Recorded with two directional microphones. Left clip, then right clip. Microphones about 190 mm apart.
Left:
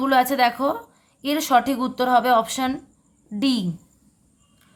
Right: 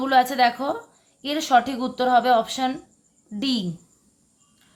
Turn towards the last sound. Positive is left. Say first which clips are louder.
# left 3 dB
turn(degrees=20)  # may be behind; listen again after turning